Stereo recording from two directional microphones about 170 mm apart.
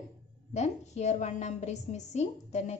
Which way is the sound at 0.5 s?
40° left (ahead or behind).